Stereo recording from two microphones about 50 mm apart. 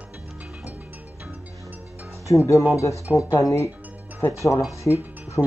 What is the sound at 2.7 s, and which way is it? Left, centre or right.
Speech, left.